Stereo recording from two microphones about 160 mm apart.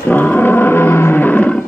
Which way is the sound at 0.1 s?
10° left (ahead or behind).